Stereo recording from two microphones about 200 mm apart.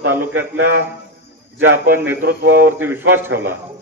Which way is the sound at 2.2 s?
55° right (ahead or behind).